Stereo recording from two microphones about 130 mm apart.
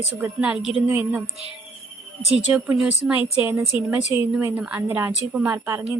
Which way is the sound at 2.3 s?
5° right (ahead or behind).